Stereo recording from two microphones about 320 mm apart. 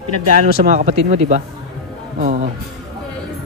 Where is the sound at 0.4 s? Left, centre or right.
Right.